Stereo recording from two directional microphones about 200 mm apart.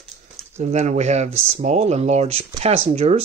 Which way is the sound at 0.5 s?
35° right (ahead or behind).